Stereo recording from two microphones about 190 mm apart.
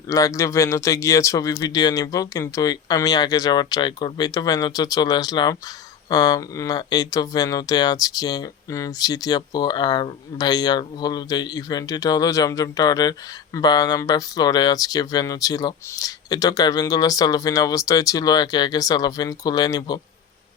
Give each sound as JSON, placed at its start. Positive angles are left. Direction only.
{"t": 0.1, "sound": "speech", "side_deg": 15}